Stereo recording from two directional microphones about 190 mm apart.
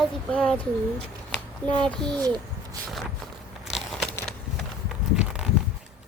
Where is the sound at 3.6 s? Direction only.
Centre (ahead or behind).